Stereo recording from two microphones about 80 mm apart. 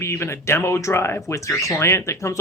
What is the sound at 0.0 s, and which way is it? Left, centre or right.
Speech, left.